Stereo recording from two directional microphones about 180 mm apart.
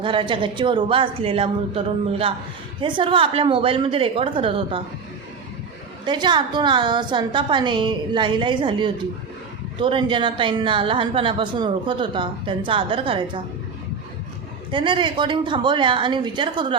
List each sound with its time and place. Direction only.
0.0 s speech: 30° right (ahead or behind)
6.1 s speech: 25° right (ahead or behind)
14.7 s speech: 25° right (ahead or behind)